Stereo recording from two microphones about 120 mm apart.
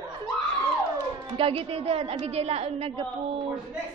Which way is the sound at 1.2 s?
50° right (ahead or behind).